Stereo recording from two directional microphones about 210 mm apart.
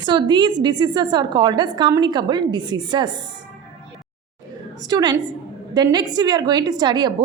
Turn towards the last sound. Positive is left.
turn(degrees=-20)  # may be behind; listen again after turning